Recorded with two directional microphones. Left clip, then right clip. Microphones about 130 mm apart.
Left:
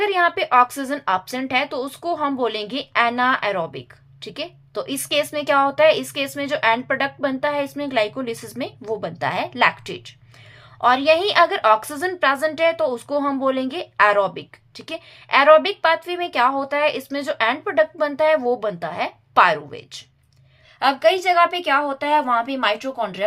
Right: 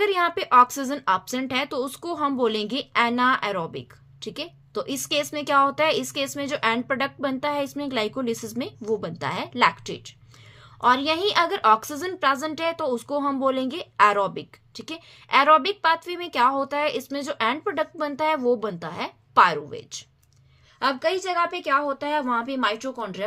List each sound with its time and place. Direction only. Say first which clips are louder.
0.0 s a woman's voice: left 4 dB; 35° right (ahead or behind); by 23.2 s 20° right (ahead or behind)